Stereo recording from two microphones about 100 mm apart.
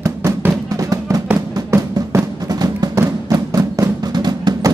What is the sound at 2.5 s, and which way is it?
Music, 40° right (ahead or behind).